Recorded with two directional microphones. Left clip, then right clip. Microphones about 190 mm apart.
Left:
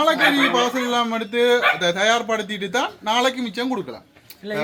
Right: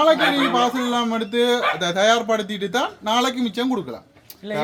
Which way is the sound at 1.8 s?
65° right (ahead or behind).